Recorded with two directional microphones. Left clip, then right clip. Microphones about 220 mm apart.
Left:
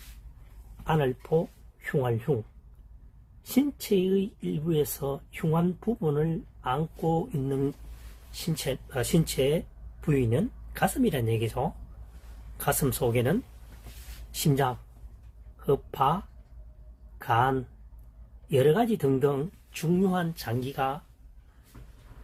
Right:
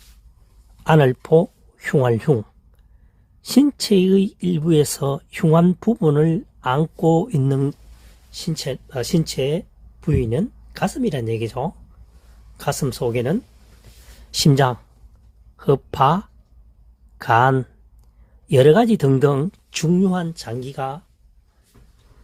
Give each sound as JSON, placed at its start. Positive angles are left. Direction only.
{"t": 0.9, "sound": "speech", "side_deg": -55}
{"t": 3.5, "sound": "speech", "side_deg": -50}
{"t": 14.5, "sound": "speech", "side_deg": -50}